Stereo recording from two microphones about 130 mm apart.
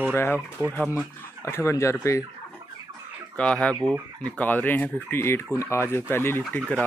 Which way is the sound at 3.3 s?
10° left (ahead or behind).